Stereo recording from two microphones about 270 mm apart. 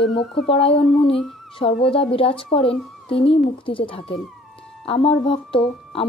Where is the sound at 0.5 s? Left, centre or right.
Left.